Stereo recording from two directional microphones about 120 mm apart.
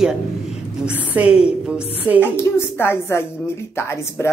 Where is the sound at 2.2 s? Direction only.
20° left (ahead or behind).